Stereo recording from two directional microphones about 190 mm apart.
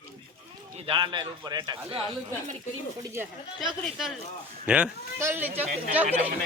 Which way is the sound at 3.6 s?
Centre (ahead or behind).